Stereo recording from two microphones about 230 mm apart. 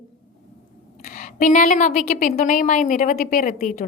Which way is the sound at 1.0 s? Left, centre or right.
Left.